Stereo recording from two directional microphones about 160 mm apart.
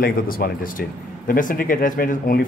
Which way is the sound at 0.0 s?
65° left (ahead or behind).